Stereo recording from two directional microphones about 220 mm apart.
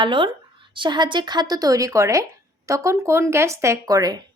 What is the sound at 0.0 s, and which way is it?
Speech, 20° right (ahead or behind).